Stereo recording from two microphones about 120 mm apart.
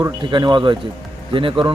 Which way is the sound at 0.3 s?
40° right (ahead or behind).